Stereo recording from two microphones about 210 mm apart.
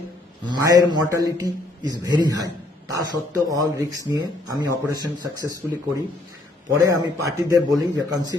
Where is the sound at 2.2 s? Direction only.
20° right (ahead or behind).